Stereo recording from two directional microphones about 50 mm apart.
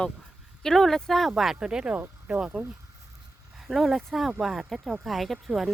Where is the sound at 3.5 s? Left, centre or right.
Centre.